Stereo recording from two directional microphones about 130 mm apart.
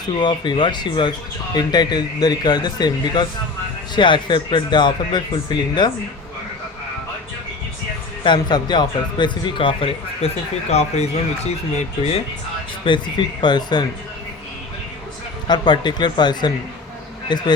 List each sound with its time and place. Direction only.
0.2 s speech: 35° left (ahead or behind)
8.2 s speech: 35° left (ahead or behind); by 12.2 s 55° left (ahead or behind)
12.8 s speech: 40° left (ahead or behind)
15.4 s speech: 35° left (ahead or behind)